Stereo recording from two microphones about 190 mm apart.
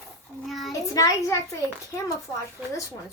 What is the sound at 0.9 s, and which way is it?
Speech, 15° left (ahead or behind).